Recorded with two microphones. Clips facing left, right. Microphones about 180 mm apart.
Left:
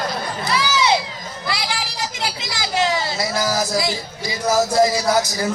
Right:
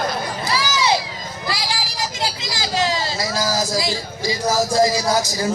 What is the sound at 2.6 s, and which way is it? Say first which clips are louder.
Speech: left 1 dB; 20° left (ahead or behind).